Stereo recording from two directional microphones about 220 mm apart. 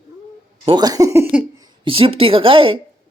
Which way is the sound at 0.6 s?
20° right (ahead or behind).